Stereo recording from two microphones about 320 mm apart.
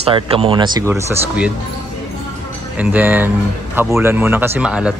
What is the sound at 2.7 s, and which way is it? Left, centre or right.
Speech, centre.